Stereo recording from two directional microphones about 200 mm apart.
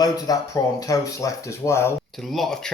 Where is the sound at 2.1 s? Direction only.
Centre (ahead or behind).